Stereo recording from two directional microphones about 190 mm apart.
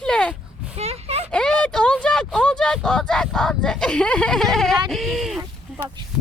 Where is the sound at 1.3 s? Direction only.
5° left (ahead or behind).